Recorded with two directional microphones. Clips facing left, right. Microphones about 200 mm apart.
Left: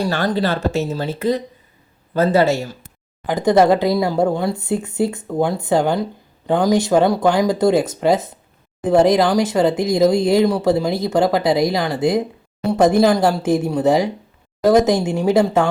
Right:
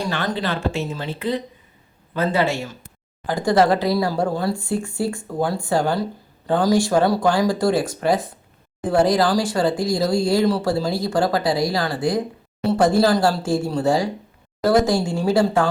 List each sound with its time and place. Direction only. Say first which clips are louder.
0.1 s speech: left 5 dB; 40° left (ahead or behind)
3.2 s speech: left 4 dB; 20° left (ahead or behind)